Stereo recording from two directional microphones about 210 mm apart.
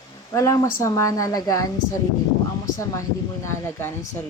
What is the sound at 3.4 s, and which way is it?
Speech, 10° left (ahead or behind).